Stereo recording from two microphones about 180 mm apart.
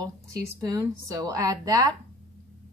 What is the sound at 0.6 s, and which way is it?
Speech, 20° right (ahead or behind).